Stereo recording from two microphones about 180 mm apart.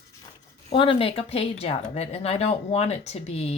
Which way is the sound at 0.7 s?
30° left (ahead or behind).